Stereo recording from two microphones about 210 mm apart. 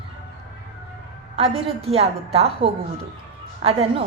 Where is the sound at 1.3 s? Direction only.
30° right (ahead or behind).